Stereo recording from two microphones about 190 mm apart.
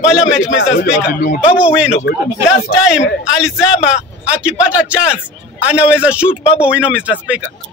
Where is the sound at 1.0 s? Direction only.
50° left (ahead or behind).